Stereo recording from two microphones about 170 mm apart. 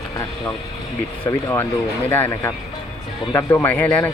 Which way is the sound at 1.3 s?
15° left (ahead or behind).